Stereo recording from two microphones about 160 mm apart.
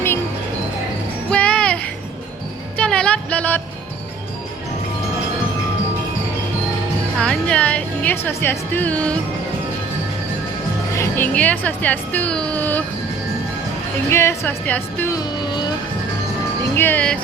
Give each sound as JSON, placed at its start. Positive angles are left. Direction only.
{"t": 1.3, "sound": "music", "side_deg": 5}
{"t": 2.7, "sound": "a sound", "side_deg": 5}
{"t": 7.2, "sound": "music", "side_deg": 5}
{"t": 10.9, "sound": "speech", "side_deg": 15}
{"t": 14.1, "sound": "speech", "side_deg": 15}
{"t": 15.1, "sound": "a sound", "side_deg": 25}
{"t": 16.7, "sound": "speech", "side_deg": 10}